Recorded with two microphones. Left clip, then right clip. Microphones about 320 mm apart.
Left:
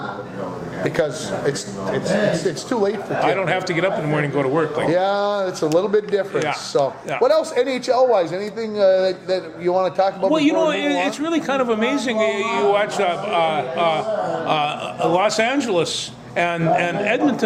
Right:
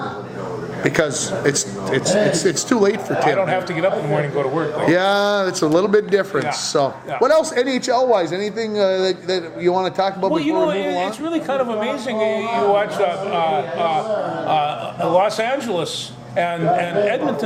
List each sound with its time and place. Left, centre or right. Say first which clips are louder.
0.9 s a man's voice: right 3 dB; right
3.3 s a man's voice: right 1 dB; left
4.9 s a man's voice: right 5 dB; right
10.3 s a man's voice: left 1 dB; left
14.4 s a sound: right 3 dB; left
15.1 s a man's voice: right 1 dB; left